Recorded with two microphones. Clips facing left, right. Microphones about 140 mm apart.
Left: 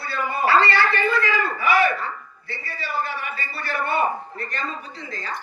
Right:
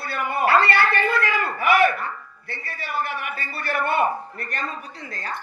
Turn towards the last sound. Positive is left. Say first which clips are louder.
# even
turn(degrees=-55)  # may be behind; listen again after turning